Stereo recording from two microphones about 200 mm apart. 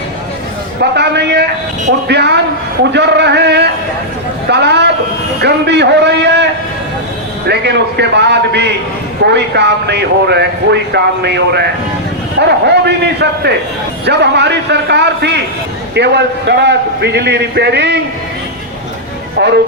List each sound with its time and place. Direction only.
0.8 s speech: 55° right (ahead or behind)
19.4 s speech: 55° right (ahead or behind)